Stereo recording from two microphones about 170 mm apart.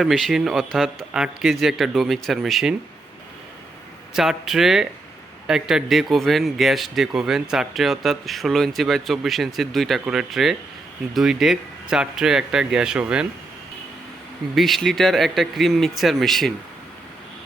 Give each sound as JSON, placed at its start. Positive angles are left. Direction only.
{"t": 0.0, "sound": "speech", "side_deg": 0}
{"t": 4.1, "sound": "speech", "side_deg": 0}
{"t": 14.5, "sound": "speech", "side_deg": 0}